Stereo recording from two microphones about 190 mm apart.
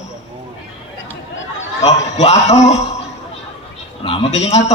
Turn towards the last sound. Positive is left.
turn(degrees=35)  # may be behind; listen again after turning